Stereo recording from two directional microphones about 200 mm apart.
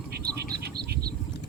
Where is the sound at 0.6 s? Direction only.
50° right (ahead or behind).